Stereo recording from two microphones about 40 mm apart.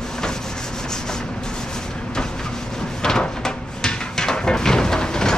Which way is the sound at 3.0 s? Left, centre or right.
Centre.